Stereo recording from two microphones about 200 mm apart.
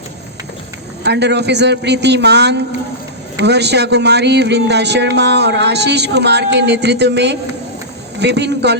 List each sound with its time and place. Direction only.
1.0 s speech: 55° right (ahead or behind)